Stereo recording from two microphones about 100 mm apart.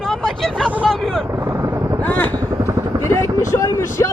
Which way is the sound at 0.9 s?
Centre (ahead or behind).